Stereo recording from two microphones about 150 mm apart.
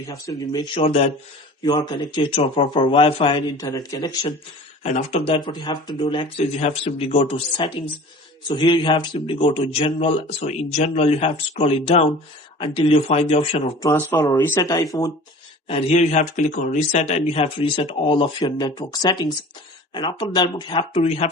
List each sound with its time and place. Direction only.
0.1 s a man's voice: 25° left (ahead or behind); by 1.1 s 45° left (ahead or behind)
1.6 s a man's voice: 30° left (ahead or behind)
4.8 s a man's voice: 45° left (ahead or behind)
14.1 s speech: 20° left (ahead or behind)
15.6 s a man's voice: 45° left (ahead or behind)